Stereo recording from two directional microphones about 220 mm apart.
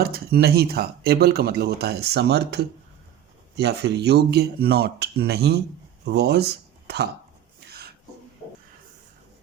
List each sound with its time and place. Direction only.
0.0 s speech: 45° right (ahead or behind)